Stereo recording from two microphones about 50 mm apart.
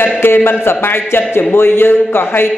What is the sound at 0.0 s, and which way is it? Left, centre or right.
A man's voice, left.